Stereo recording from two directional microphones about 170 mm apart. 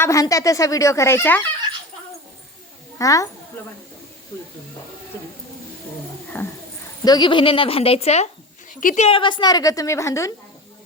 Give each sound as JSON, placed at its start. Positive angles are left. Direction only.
{"t": 0.0, "sound": "speech", "side_deg": 20}
{"t": 3.0, "sound": "a woman's voice", "side_deg": 20}
{"t": 6.3, "sound": "speech", "side_deg": 10}
{"t": 7.0, "sound": "a woman's voice", "side_deg": 25}
{"t": 8.7, "sound": "a woman's voice", "side_deg": 50}
{"t": 9.0, "sound": "a woman's voice", "side_deg": 30}